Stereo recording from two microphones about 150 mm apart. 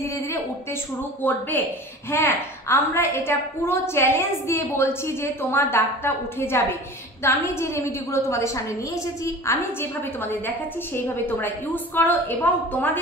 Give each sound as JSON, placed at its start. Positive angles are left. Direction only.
{"t": 1.2, "sound": "a woman's voice", "side_deg": 10}